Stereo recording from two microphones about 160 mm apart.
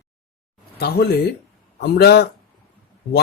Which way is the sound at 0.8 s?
85° left.